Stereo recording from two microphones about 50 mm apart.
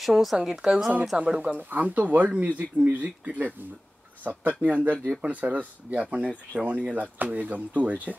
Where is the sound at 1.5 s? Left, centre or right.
Right.